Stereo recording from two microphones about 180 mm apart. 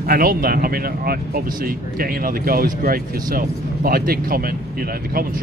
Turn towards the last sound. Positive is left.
turn(degrees=-55)  # may be behind; listen again after turning